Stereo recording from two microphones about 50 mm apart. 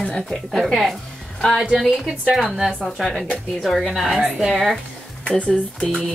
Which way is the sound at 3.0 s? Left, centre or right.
Centre.